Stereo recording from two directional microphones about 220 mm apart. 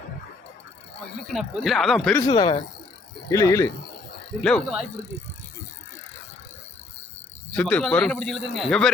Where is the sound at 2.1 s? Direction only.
20° left (ahead or behind).